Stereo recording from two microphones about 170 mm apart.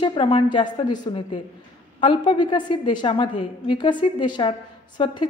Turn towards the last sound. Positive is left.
turn(degrees=30)  # may be behind; listen again after turning